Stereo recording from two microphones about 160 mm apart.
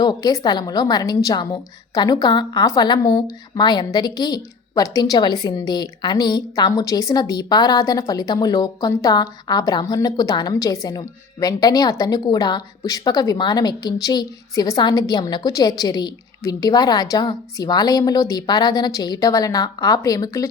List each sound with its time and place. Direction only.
0.0 s a woman's voice: 25° left (ahead or behind)